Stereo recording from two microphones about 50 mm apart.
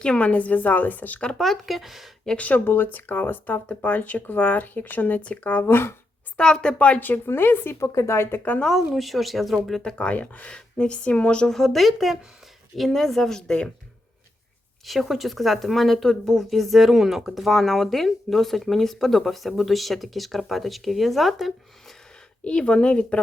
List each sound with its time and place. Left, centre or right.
0.0 s speech: left
1.4 s speech: centre
2.4 s speech: left
6.3 s speech: centre
6.7 s speech: left
7.0 s speech: left
7.8 s a woman's voice: left
8.9 s speech: centre
9.8 s speech: left
11.5 s speech: centre
13.5 s speech: centre
14.8 s speech: centre
22.4 s speech: left